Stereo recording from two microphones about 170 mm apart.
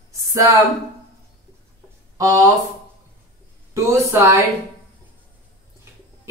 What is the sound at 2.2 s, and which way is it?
Speech, 20° right (ahead or behind).